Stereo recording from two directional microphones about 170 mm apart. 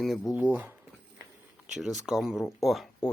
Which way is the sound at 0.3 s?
10° right (ahead or behind).